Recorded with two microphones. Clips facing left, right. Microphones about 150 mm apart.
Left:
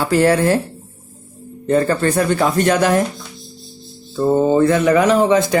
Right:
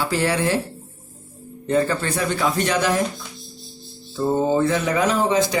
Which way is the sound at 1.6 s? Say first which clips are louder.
Left 5 dB; 50° left (ahead or behind).